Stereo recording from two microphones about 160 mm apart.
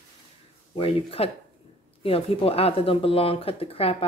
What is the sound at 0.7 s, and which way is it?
Speech, 35° left (ahead or behind).